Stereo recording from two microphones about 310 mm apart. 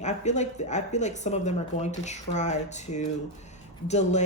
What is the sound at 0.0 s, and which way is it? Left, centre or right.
Speech, left.